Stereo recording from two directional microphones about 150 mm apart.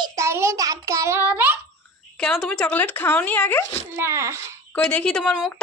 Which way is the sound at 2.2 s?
5° left (ahead or behind).